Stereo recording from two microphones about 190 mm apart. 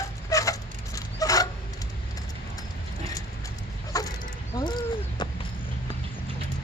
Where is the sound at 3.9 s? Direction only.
20° left (ahead or behind).